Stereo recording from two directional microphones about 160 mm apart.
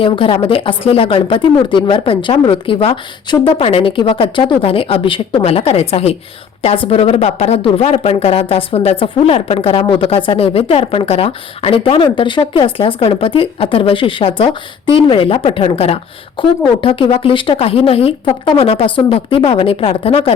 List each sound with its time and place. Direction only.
0.0 s speech: 35° left (ahead or behind)